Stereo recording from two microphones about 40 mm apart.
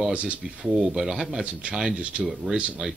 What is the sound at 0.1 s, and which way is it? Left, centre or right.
Speech, right.